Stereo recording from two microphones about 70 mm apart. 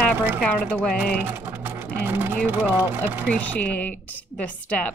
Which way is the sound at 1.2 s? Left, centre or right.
Right.